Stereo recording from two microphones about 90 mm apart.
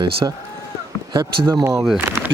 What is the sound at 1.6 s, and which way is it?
Speech, 35° right (ahead or behind).